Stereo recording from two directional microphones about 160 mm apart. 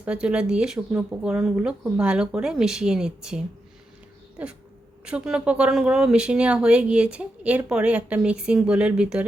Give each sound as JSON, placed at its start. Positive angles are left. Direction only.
{"t": 0.0, "sound": "speech", "side_deg": -5}